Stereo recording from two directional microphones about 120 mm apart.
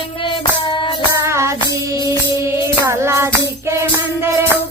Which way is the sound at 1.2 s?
25° right (ahead or behind).